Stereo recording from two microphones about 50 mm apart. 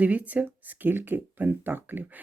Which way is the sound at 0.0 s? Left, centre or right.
Right.